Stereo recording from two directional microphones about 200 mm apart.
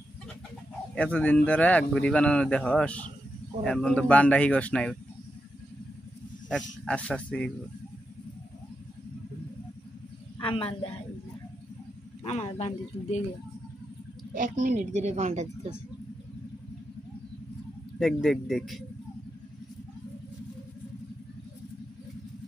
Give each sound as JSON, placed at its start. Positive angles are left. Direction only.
{"t": 0.9, "sound": "a man's voice", "side_deg": 5}
{"t": 6.5, "sound": "a man's voice", "side_deg": 5}
{"t": 10.4, "sound": "speech", "side_deg": 25}
{"t": 12.2, "sound": "speech", "side_deg": 30}
{"t": 14.3, "sound": "a woman's voice", "side_deg": -40}
{"t": 17.9, "sound": "a man's voice", "side_deg": 0}